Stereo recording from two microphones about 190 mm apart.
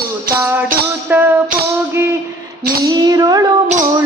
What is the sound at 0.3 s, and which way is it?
Music, 10° right (ahead or behind).